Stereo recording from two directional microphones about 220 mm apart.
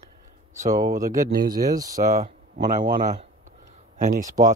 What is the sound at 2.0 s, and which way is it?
Speech, 35° right (ahead or behind).